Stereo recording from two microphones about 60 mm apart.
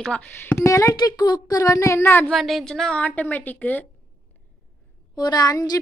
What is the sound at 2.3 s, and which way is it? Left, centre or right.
Speech, centre.